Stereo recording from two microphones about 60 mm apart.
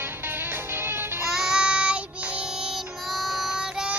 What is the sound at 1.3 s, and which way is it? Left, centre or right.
Child singing, centre.